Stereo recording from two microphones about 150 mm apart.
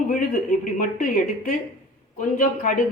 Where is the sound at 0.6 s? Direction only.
60° left (ahead or behind).